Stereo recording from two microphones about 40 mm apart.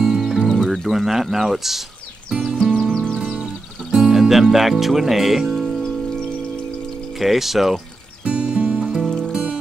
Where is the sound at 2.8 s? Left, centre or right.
Centre.